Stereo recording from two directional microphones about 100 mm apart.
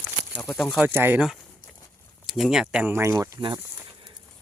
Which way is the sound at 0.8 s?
20° right (ahead or behind).